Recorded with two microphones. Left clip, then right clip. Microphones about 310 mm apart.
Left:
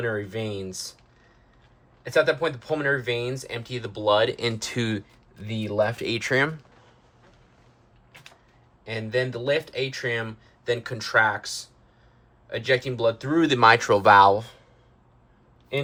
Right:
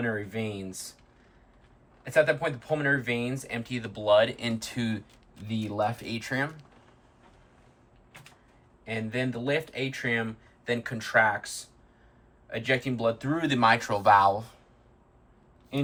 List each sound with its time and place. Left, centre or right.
0.3 s speech: centre
2.0 s speech: centre
8.9 s speech: centre